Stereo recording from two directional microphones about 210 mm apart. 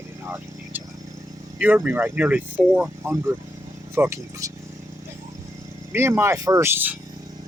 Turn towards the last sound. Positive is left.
turn(degrees=-10)  # may be behind; listen again after turning